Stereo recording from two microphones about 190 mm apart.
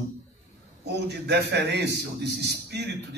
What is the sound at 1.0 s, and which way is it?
A man's voice, 60° right (ahead or behind).